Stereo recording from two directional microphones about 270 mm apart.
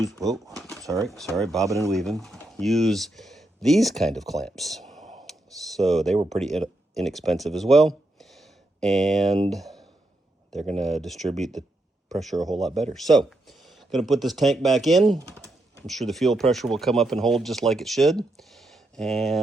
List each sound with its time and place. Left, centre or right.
0.2 s speech: centre
0.5 s a sound: centre
1.0 s speech: centre
1.6 s speech: centre
1.9 s speech: centre
4.9 s whispering: right
5.7 s speech: centre
6.1 s speech: right
6.4 s speech: centre